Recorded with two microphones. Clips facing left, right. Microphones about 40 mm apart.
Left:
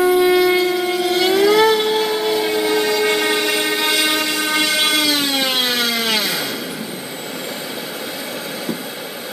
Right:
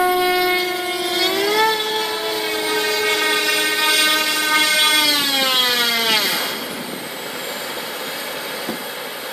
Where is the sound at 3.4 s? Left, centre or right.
Centre.